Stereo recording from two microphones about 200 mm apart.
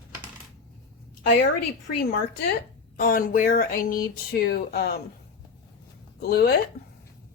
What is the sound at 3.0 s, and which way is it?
Speech, 45° left (ahead or behind).